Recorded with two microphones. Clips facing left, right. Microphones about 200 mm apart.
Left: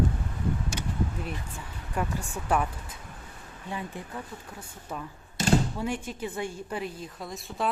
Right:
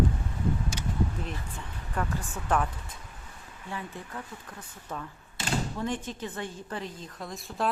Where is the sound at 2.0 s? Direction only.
10° left (ahead or behind).